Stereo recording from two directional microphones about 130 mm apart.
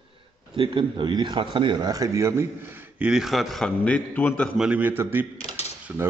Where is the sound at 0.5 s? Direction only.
35° right (ahead or behind); by 4.5 s 10° left (ahead or behind).